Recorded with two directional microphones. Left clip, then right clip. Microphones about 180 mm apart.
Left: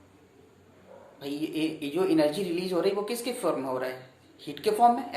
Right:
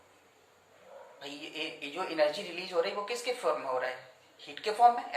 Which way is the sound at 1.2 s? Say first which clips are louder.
Left 8 dB; 35° left (ahead or behind).